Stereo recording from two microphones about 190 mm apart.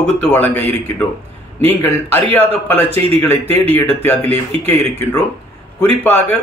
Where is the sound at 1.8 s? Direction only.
10° left (ahead or behind).